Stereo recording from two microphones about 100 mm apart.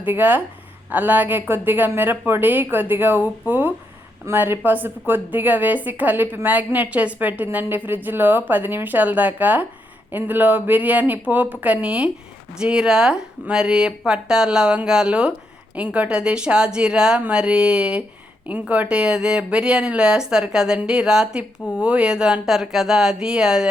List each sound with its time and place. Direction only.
0.0 s a woman's voice: 20° right (ahead or behind)